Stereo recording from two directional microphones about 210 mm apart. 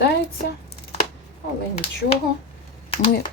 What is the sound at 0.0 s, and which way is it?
Speech, 50° left (ahead or behind).